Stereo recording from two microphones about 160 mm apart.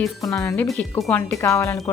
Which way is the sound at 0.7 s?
5° left (ahead or behind).